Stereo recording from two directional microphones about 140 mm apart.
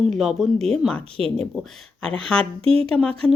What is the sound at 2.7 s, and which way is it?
Speech, 40° right (ahead or behind).